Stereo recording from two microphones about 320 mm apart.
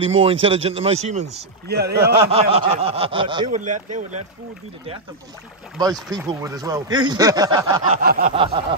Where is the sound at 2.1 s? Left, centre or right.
Centre.